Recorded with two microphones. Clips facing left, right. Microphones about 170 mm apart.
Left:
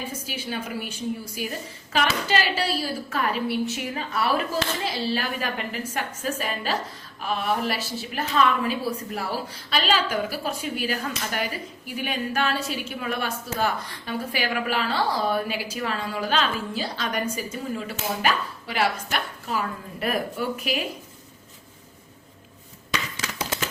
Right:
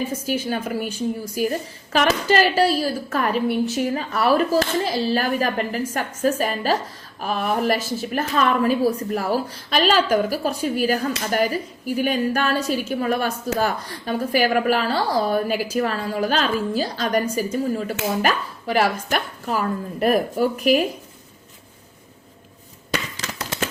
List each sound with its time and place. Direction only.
0.3 s a woman's voice: 45° right (ahead or behind)
18.2 s chopping: 45° right (ahead or behind)
19.0 s speech: 45° right (ahead or behind)